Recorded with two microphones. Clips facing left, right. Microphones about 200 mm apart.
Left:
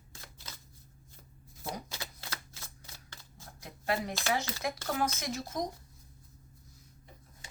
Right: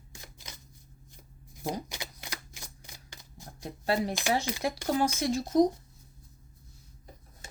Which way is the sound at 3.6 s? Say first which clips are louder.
Right 5 dB; 35° right (ahead or behind).